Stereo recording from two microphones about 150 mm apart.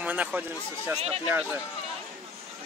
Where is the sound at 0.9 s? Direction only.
45° right (ahead or behind).